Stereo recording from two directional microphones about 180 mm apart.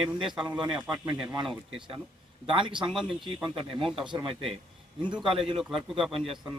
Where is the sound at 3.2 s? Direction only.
25° right (ahead or behind).